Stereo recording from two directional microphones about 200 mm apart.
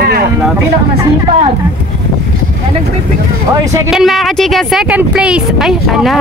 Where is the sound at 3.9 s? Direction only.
Centre (ahead or behind).